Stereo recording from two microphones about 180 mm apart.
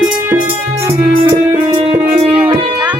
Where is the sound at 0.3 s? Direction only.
15° right (ahead or behind).